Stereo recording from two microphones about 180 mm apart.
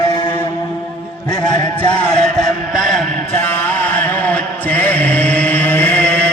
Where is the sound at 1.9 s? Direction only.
5° left (ahead or behind).